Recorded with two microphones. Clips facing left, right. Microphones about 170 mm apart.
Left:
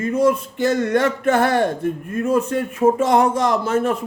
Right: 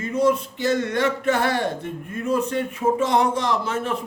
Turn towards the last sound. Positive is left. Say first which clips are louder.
# left 5 dB
turn(degrees=45)  # may be behind; listen again after turning